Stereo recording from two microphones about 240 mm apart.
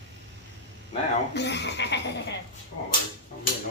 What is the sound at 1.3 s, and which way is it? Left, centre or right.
Speech, left.